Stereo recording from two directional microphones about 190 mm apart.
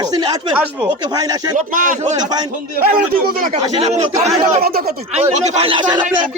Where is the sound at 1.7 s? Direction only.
40° right (ahead or behind).